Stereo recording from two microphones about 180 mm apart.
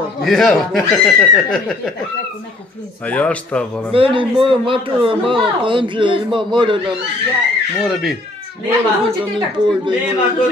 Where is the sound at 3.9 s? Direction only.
30° right (ahead or behind).